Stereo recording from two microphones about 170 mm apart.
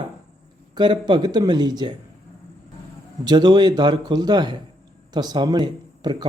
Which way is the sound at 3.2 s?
25° right (ahead or behind).